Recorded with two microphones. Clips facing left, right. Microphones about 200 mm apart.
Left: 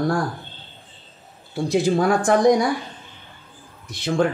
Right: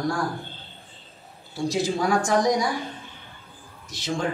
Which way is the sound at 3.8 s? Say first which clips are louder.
Left 6 dB; 60° left (ahead or behind).